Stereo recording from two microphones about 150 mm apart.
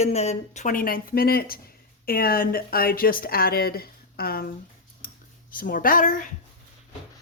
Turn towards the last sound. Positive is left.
turn(degrees=65)  # may be behind; listen again after turning